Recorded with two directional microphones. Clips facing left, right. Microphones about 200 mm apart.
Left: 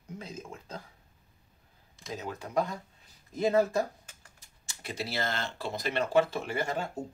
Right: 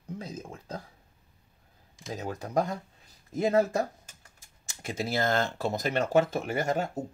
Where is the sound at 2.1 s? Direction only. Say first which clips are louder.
Right 2 dB; 40° right (ahead or behind).